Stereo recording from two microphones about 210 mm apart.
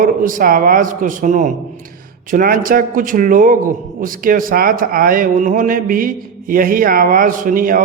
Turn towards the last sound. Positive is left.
turn(degrees=-40)  # may be behind; listen again after turning